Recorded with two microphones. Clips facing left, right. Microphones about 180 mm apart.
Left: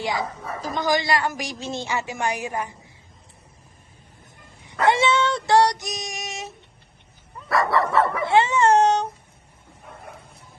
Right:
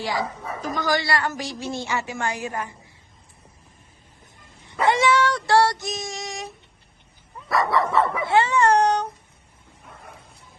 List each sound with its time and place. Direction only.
0.0 s a woman's voice: 20° left (ahead or behind)
4.9 s dog: 25° left (ahead or behind)
7.4 s dog: centre (ahead or behind)
8.2 s speech: 20° left (ahead or behind)